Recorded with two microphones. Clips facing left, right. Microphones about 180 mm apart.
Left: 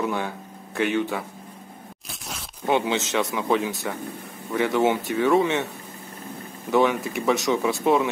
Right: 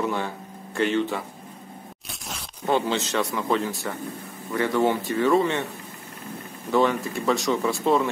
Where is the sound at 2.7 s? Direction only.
20° left (ahead or behind).